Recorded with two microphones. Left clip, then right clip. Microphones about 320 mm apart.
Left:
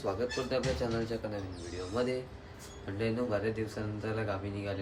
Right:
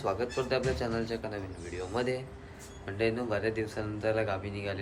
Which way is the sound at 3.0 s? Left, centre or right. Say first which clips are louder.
Right 2 dB; centre.